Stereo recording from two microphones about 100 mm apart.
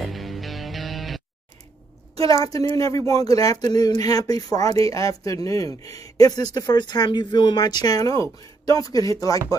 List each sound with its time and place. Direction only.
0.0 s music: centre (ahead or behind)
2.2 s speech: 35° left (ahead or behind)